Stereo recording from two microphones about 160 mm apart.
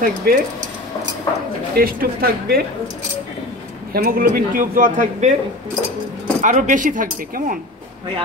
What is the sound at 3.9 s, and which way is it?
A man's voice, 70° right (ahead or behind).